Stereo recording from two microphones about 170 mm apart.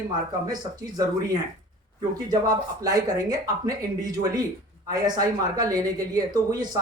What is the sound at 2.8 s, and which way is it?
Speech, 20° right (ahead or behind).